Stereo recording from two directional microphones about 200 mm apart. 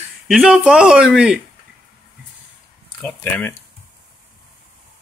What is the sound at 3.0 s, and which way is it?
Speech, 10° left (ahead or behind).